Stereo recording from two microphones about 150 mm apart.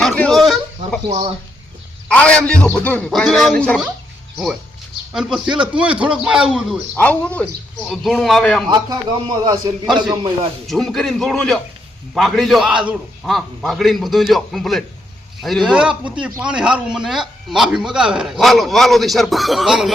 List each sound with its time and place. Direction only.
0.0 s a sound: centre (ahead or behind)
2.0 s speech: 10° left (ahead or behind)
5.1 s a man's voice: 5° right (ahead or behind)
6.9 s a man's voice: 10° left (ahead or behind)
8.6 s a man's voice: 30° right (ahead or behind)
10.7 s a man's voice: centre (ahead or behind)